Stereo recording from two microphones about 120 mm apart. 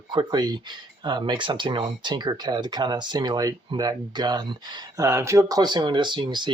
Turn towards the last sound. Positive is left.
turn(degrees=-40)  # may be behind; listen again after turning